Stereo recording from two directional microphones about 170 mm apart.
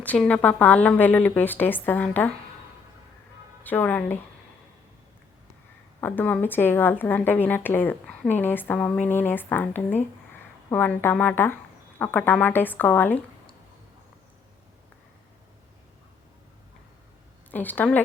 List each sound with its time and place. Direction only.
0.0 s a woman's voice: 10° left (ahead or behind)
3.6 s a woman's voice: 10° left (ahead or behind)
6.0 s a woman's voice: 10° left (ahead or behind)
17.5 s a woman's voice: 10° left (ahead or behind)